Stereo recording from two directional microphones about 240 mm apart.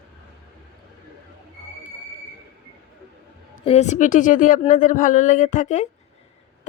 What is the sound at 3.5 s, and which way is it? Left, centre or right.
A woman's voice, left.